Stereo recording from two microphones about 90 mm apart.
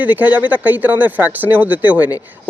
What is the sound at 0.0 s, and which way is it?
A man's voice, 15° right (ahead or behind).